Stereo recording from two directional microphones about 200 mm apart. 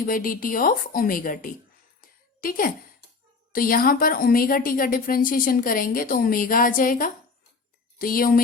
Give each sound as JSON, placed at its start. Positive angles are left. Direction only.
{"t": 0.0, "sound": "a woman's voice", "side_deg": 45}
{"t": 2.0, "sound": "a sound", "side_deg": 45}
{"t": 3.5, "sound": "a woman's voice", "side_deg": 45}